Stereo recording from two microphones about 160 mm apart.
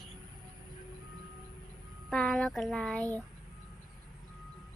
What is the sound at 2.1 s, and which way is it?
Speech, centre (ahead or behind).